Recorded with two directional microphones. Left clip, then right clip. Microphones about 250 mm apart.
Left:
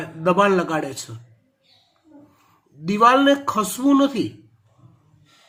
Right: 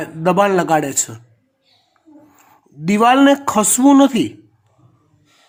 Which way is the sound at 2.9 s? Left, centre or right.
Right.